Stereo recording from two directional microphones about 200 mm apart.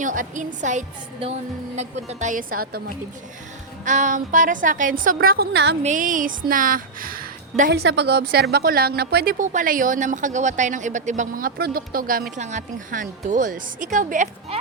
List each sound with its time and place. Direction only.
0.0 s a woman's voice: 40° right (ahead or behind)
3.8 s a woman's voice: 40° right (ahead or behind); by 5.7 s 55° right (ahead or behind)
5.8 s a woman's voice: 40° right (ahead or behind)
7.7 s a woman's voice: 60° right (ahead or behind); by 14.6 s 40° right (ahead or behind)